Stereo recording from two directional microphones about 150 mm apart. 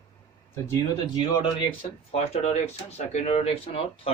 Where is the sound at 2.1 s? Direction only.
45° left (ahead or behind).